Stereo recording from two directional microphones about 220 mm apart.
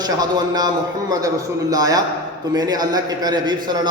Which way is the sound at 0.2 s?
15° right (ahead or behind).